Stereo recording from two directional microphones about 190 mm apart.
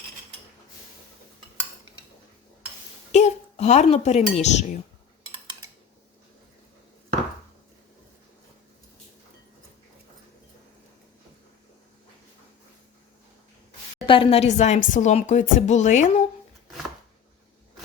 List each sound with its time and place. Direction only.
3.1 s speech: 35° left (ahead or behind)
14.1 s speech: 30° left (ahead or behind)